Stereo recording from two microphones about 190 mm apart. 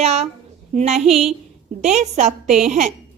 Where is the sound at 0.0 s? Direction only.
35° right (ahead or behind).